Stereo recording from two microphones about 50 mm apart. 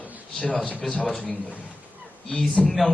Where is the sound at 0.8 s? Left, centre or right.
Centre.